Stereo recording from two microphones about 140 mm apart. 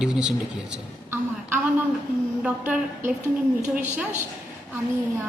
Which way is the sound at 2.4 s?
10° right (ahead or behind).